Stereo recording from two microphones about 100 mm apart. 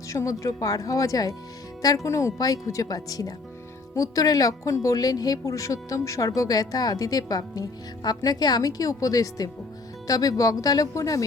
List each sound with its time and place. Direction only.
0.1 s speech: 30° left (ahead or behind)